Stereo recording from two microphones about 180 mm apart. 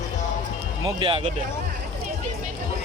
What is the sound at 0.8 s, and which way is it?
Speech, 30° right (ahead or behind).